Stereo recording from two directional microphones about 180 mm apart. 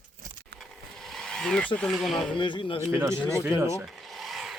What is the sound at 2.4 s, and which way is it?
Speech, 25° left (ahead or behind).